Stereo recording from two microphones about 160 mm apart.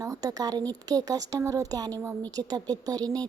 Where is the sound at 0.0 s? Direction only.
20° right (ahead or behind).